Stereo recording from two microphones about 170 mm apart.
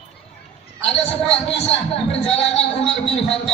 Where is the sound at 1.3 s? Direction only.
35° left (ahead or behind).